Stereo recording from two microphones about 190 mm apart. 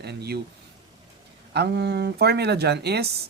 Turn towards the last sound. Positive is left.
turn(degrees=-60)  # may be behind; listen again after turning